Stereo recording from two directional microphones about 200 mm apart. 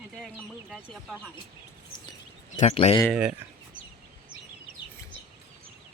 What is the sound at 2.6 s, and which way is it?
Speech, 35° left (ahead or behind).